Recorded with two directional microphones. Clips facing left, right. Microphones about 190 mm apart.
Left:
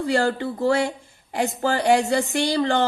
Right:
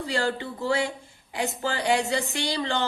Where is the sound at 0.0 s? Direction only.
50° left (ahead or behind).